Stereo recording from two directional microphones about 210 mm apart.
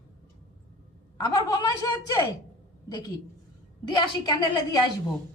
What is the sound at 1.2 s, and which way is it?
A woman's voice, 20° left (ahead or behind).